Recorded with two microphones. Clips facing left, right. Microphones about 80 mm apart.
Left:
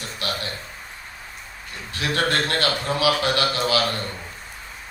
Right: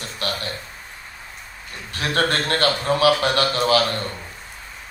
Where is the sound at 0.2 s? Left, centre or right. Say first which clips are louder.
Right 2 dB; right.